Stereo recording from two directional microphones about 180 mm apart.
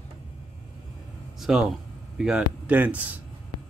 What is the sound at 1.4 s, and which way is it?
Speech, 5° right (ahead or behind).